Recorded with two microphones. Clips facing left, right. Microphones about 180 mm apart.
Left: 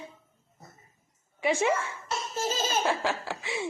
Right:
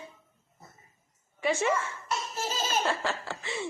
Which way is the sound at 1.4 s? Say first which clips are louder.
Left 1 dB; 15° left (ahead or behind).